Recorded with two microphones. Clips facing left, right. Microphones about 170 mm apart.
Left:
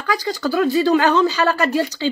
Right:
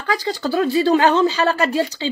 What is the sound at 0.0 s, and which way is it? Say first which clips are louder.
Speech: even; 30° right (ahead or behind).